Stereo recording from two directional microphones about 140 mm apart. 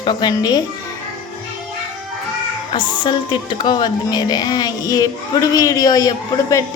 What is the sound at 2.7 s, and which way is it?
Speech, 35° left (ahead or behind).